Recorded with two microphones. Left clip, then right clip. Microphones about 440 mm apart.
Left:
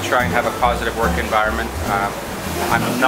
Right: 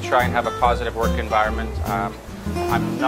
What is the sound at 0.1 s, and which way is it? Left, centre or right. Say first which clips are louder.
Speech: left 1 dB; right.